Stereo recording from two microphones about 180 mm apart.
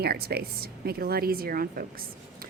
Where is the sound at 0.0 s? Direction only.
60° right (ahead or behind).